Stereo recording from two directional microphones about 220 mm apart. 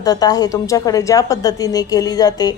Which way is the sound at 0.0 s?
15° left (ahead or behind).